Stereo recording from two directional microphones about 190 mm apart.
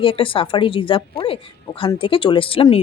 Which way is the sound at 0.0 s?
30° left (ahead or behind).